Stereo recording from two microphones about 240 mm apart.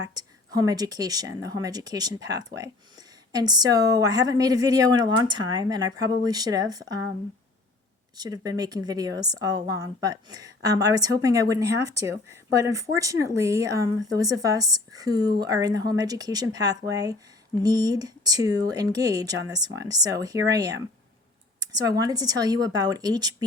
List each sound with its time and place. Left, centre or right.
0.0 s a woman's voice: centre
8.1 s a woman's voice: centre